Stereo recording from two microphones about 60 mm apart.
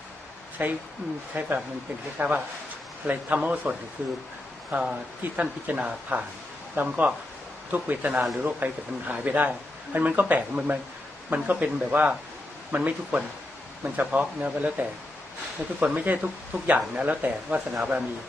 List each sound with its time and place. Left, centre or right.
0.6 s speech: right